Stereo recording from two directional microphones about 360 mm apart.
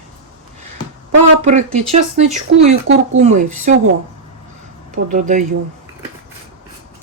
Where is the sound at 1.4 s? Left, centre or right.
Centre.